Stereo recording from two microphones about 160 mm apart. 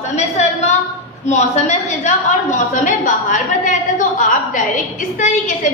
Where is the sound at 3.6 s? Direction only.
55° left (ahead or behind).